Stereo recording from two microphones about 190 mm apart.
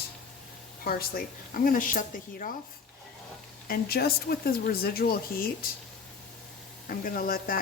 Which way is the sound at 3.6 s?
55° left (ahead or behind).